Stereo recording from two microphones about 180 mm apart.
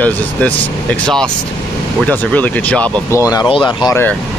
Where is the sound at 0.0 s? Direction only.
5° left (ahead or behind); by 3.9 s 25° left (ahead or behind).